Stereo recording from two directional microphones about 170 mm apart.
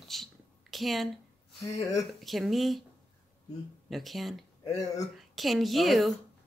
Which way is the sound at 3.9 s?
Centre (ahead or behind).